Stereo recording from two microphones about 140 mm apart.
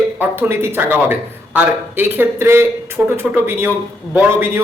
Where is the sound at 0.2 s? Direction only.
15° right (ahead or behind).